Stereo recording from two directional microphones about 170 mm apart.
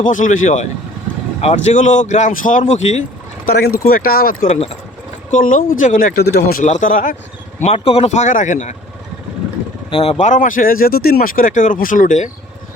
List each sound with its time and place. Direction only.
0.0 s speech: 50° left (ahead or behind)
3.4 s speech: 60° left (ahead or behind)
4.4 s speech: 35° left (ahead or behind)
5.3 s speech: 50° left (ahead or behind)
6.2 s speech: 65° left (ahead or behind)
6.7 s speech: 50° left (ahead or behind)
7.6 s speech: 35° left (ahead or behind)
9.9 s speech: 35° left (ahead or behind)